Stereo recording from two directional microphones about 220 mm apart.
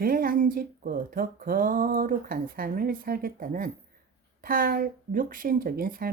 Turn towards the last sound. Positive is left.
turn(degrees=-40)  # may be behind; listen again after turning